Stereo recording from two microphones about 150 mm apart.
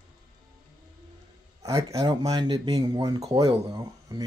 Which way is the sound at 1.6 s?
20° right (ahead or behind).